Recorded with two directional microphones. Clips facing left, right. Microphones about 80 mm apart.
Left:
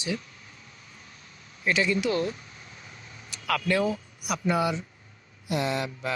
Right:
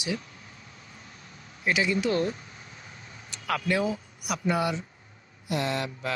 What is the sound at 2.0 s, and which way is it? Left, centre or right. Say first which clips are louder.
Speech: right 1 dB; right.